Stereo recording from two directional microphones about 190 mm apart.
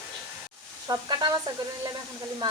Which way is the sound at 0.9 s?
20° right (ahead or behind).